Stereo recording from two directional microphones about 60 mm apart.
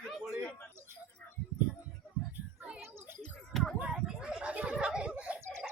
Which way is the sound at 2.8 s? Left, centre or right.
Right.